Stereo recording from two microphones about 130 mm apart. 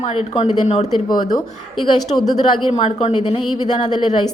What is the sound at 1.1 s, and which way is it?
Speech, 35° left (ahead or behind).